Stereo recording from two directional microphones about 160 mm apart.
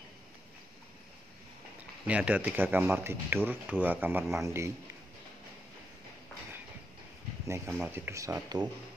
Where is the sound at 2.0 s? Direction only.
10° right (ahead or behind).